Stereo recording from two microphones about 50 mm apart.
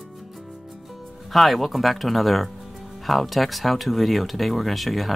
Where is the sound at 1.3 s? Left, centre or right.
Centre.